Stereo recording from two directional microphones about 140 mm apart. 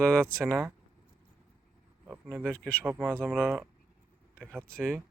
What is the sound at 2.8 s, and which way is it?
Speech, 15° right (ahead or behind).